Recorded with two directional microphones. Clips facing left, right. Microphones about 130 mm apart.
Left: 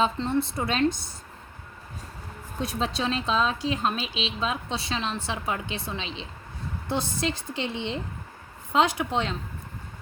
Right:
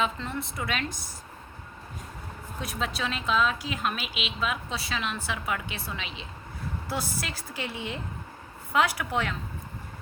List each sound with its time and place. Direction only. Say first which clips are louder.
0.0 s speech: left 6 dB; 30° left (ahead or behind)
2.6 s speech: left 4 dB; 30° left (ahead or behind)